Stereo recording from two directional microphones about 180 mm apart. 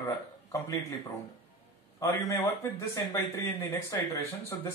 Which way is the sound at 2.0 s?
15° left (ahead or behind).